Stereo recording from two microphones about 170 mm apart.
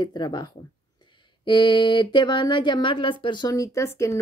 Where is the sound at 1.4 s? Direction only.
25° left (ahead or behind).